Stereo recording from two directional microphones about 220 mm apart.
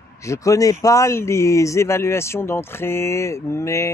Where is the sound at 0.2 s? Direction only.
15° left (ahead or behind).